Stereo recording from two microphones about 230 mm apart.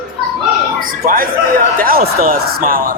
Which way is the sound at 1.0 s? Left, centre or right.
Right.